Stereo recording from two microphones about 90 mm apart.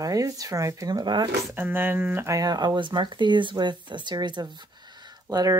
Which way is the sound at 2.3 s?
45° right (ahead or behind).